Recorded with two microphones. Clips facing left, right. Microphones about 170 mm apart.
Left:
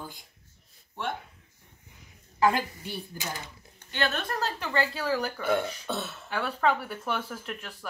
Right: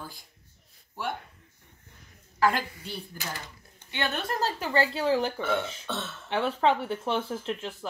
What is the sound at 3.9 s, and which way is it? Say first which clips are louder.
Speech: left 1 dB; 15° right (ahead or behind).